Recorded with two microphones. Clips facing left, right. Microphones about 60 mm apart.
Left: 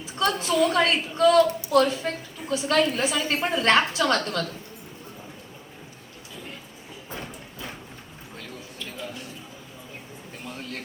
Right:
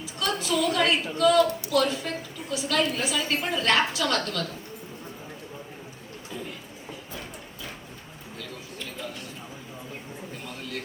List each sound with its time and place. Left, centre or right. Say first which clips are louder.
0.0 s a woman's voice: left 4 dB; left